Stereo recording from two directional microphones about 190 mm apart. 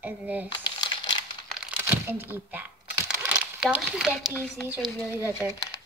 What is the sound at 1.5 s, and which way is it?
Crumpling, 10° right (ahead or behind).